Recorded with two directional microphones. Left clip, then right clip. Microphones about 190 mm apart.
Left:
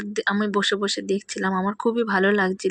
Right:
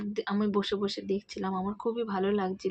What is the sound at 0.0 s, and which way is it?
Speech, 20° left (ahead or behind).